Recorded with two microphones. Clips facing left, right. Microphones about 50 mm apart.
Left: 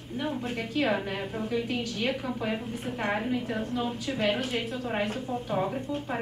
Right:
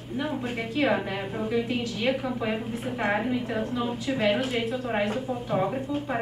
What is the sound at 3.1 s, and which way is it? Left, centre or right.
A woman's voice, centre.